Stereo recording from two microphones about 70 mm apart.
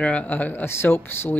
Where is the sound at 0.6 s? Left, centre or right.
Left.